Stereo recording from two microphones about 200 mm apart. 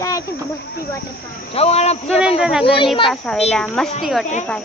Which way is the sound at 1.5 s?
30° left (ahead or behind).